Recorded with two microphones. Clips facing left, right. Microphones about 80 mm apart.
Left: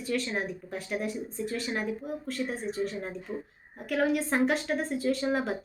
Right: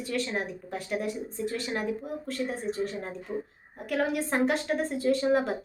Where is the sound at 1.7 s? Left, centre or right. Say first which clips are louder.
Right 1 dB; right.